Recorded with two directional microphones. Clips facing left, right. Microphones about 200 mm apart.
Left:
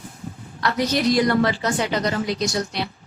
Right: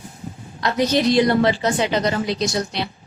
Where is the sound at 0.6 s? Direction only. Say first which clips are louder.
Right 2 dB; 20° right (ahead or behind).